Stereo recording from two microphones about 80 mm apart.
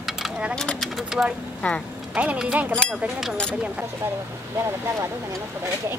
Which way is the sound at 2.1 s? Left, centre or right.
Centre.